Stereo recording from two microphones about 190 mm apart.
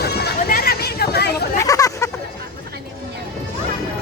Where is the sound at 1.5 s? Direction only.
15° left (ahead or behind).